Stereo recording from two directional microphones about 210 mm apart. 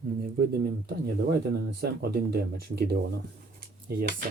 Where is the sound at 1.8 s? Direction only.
50° right (ahead or behind).